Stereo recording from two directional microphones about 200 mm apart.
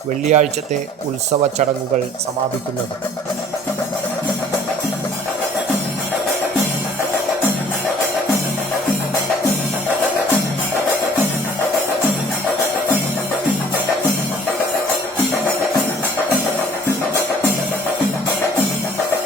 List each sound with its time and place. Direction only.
0.3 s speech: 35° right (ahead or behind)